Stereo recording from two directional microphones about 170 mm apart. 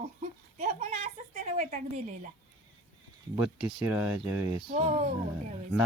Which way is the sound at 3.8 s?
10° right (ahead or behind).